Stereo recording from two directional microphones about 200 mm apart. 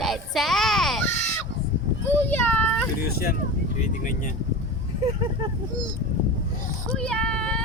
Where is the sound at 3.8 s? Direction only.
40° left (ahead or behind).